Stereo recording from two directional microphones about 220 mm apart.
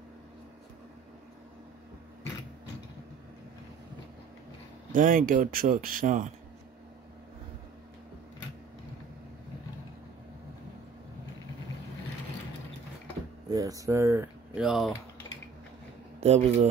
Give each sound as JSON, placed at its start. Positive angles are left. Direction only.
{"t": 4.9, "sound": "speech", "side_deg": -40}
{"t": 13.5, "sound": "speech", "side_deg": -15}
{"t": 16.2, "sound": "speech", "side_deg": -30}